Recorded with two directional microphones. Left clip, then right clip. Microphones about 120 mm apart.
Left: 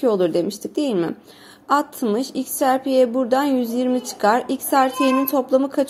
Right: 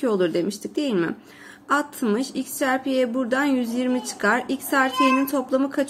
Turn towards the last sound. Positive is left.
turn(degrees=20)  # may be behind; listen again after turning